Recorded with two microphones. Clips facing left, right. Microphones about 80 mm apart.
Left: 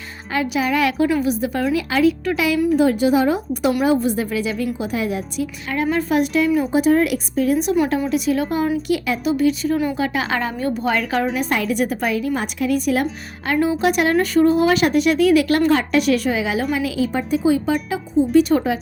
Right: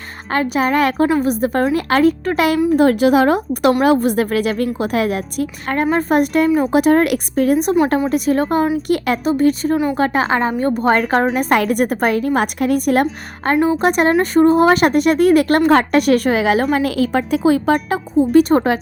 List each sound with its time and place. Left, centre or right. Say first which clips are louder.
0.3 s a woman's voice: right 3 dB; right
6.7 s a woman's voice: right 3 dB; right